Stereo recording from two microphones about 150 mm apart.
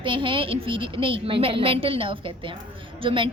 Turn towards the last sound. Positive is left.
turn(degrees=-35)  # may be behind; listen again after turning